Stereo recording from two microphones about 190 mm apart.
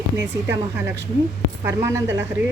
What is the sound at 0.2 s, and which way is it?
Speech, 10° right (ahead or behind).